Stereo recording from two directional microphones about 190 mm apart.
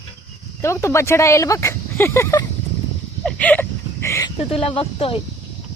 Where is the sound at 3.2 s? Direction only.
5° left (ahead or behind).